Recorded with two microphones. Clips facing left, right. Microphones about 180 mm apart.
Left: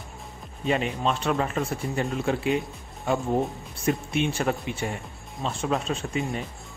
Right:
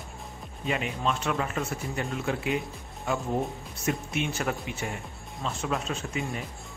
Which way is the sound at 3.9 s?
35° left (ahead or behind).